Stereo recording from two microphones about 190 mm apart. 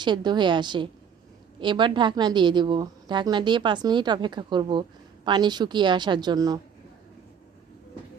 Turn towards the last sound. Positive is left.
turn(degrees=-20)  # may be behind; listen again after turning